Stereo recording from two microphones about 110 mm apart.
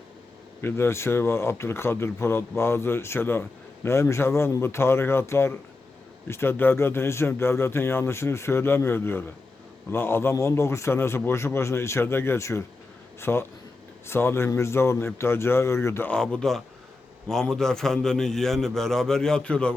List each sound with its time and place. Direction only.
0.6 s a man's voice: 20° left (ahead or behind)
16.0 s a man's voice: 10° left (ahead or behind)